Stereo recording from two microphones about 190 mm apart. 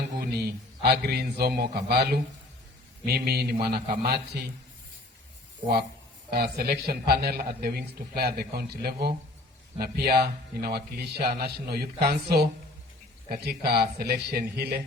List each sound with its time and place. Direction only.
0.2 s speech: 55° right (ahead or behind)
6.3 s speech: 55° right (ahead or behind)